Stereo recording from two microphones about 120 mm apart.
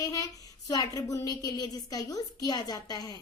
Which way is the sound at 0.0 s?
30° left (ahead or behind).